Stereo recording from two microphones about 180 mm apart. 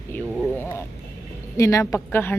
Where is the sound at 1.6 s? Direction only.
15° left (ahead or behind).